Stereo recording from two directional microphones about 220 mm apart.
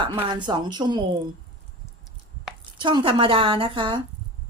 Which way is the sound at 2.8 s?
20° right (ahead or behind).